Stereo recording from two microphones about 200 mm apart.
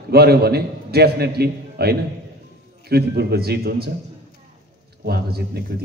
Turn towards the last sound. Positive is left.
turn(degrees=-50)  # may be behind; listen again after turning